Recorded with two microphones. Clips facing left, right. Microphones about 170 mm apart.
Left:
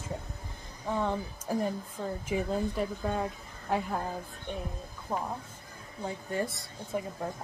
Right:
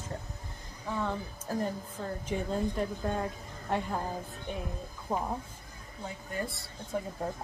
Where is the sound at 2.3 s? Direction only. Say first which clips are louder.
Left 1 dB; 5° left (ahead or behind).